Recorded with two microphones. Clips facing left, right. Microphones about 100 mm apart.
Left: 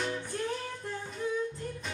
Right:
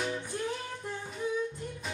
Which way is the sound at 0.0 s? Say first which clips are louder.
Even; 15° right (ahead or behind).